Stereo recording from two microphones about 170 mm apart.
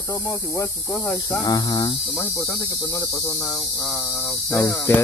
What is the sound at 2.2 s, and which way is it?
Speech, 15° left (ahead or behind).